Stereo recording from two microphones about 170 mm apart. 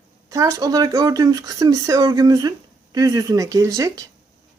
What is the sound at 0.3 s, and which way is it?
A woman's voice, 20° right (ahead or behind).